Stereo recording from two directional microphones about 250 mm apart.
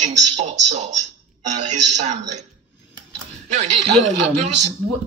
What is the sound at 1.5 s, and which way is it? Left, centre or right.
Speech, right.